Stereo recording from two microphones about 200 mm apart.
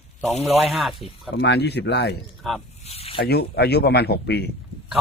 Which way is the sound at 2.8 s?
30° left (ahead or behind).